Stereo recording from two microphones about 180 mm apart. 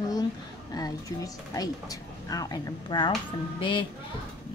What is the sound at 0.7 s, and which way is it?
Speech, 20° left (ahead or behind).